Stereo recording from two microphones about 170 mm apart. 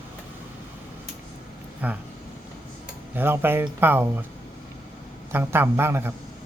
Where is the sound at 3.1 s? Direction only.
10° right (ahead or behind).